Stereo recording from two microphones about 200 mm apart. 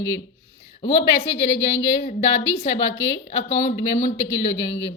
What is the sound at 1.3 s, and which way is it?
A woman's voice, 65° left (ahead or behind).